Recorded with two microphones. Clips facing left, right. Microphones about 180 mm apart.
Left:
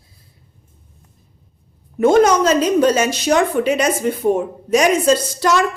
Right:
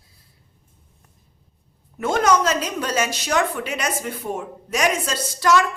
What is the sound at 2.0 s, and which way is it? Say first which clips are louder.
A woman's voice: left 7 dB; 20° left (ahead or behind).